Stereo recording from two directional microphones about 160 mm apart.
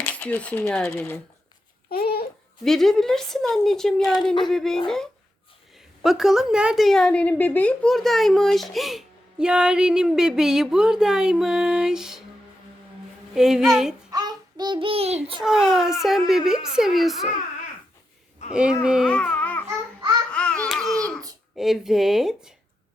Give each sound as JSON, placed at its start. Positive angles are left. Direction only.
{"t": 0.0, "sound": "speech", "side_deg": 10}
{"t": 1.9, "sound": "babbling", "side_deg": 75}
{"t": 2.6, "sound": "a woman's voice", "side_deg": 0}
{"t": 6.0, "sound": "a woman's voice", "side_deg": 0}
{"t": 13.3, "sound": "a woman's voice", "side_deg": -5}
{"t": 14.1, "sound": "child singing", "side_deg": -25}
{"t": 15.4, "sound": "a woman's voice", "side_deg": -5}
{"t": 18.5, "sound": "speech", "side_deg": -5}
{"t": 19.0, "sound": "babbling", "side_deg": 10}
{"t": 21.5, "sound": "a woman's voice", "side_deg": 0}